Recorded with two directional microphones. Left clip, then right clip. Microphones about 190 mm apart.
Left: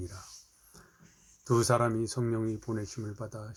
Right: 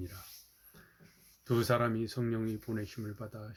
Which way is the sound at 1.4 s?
20° right (ahead or behind).